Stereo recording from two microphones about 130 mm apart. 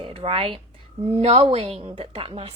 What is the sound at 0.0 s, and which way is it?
A woman's voice, 45° right (ahead or behind).